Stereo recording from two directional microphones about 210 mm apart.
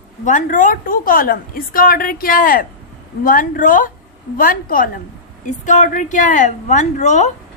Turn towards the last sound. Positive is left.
turn(degrees=35)  # may be behind; listen again after turning